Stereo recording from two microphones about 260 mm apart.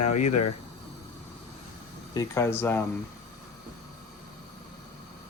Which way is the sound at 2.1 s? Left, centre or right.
Centre.